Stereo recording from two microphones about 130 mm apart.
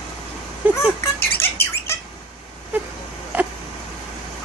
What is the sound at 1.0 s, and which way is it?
Squawk, 20° left (ahead or behind).